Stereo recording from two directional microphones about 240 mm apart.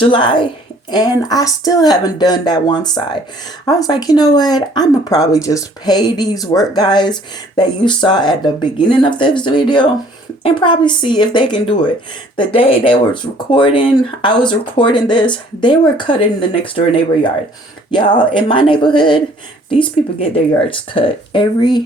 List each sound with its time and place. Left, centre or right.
0.0 s speech: left
18.3 s speech: left